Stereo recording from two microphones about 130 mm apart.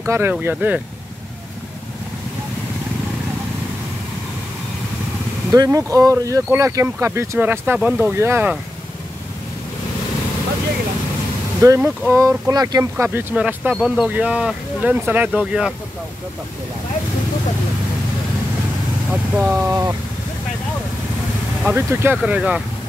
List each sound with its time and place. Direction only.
0.0 s speech: 20° right (ahead or behind)
5.5 s speech: 25° right (ahead or behind)
11.6 s speech: 20° right (ahead or behind)
13.0 s speech: 15° right (ahead or behind)
19.3 s speech: 10° right (ahead or behind)
19.6 s speech: 25° right (ahead or behind)
21.6 s speech: 15° right (ahead or behind)